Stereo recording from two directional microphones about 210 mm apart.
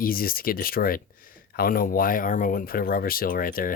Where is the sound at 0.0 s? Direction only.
45° left (ahead or behind).